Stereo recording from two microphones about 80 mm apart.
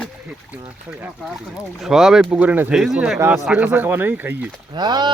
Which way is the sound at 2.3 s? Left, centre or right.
Centre.